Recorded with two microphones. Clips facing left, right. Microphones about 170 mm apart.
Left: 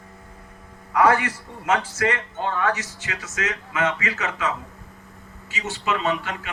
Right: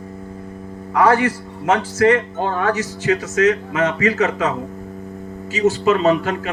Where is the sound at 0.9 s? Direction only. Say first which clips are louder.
Right 4 dB; 35° right (ahead or behind).